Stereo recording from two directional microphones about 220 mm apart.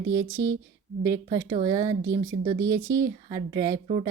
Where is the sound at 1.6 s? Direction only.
15° right (ahead or behind).